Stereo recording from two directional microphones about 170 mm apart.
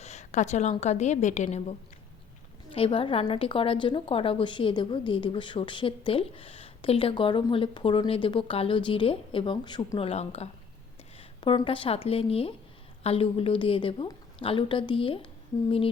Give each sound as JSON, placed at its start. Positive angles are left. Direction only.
{"t": 0.0, "sound": "a woman's voice", "side_deg": 40}